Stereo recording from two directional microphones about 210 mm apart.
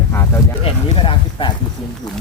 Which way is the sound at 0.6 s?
25° left (ahead or behind).